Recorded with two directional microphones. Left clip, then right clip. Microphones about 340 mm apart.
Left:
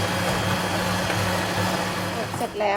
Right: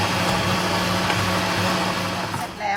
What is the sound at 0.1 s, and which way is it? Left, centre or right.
Vehicle, centre.